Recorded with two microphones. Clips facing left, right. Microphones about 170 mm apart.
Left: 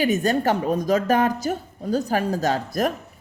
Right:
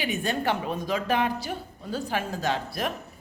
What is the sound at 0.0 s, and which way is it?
A woman's voice, 40° left (ahead or behind).